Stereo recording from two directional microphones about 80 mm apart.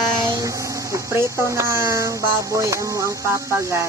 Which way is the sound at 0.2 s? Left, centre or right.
Right.